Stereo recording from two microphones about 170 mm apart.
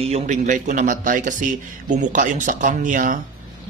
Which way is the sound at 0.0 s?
40° right (ahead or behind).